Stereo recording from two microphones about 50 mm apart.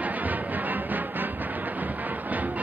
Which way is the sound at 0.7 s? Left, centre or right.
Right.